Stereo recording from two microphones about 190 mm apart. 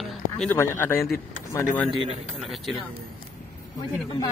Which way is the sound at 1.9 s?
25° right (ahead or behind).